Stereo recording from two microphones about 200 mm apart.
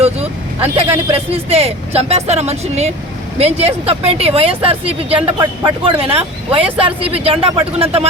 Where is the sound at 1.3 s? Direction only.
30° right (ahead or behind).